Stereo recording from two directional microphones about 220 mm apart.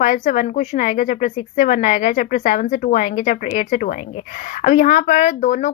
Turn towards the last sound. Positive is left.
turn(degrees=35)  # may be behind; listen again after turning